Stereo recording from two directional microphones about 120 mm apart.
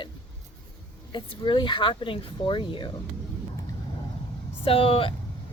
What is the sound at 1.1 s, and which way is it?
Speech, 40° left (ahead or behind).